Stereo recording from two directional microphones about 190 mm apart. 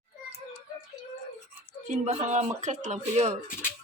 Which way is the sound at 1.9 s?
40° right (ahead or behind).